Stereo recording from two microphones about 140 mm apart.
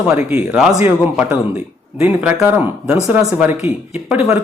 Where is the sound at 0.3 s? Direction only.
5° right (ahead or behind).